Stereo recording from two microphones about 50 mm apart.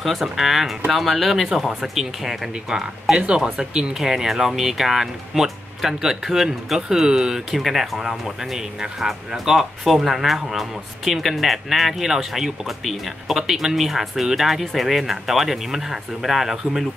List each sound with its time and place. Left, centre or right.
0.0 s speech: centre
2.5 s speech: centre